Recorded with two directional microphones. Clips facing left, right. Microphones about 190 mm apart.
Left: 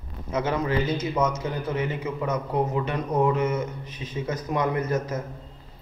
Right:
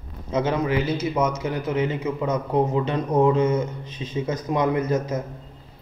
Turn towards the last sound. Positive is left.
turn(degrees=-20)  # may be behind; listen again after turning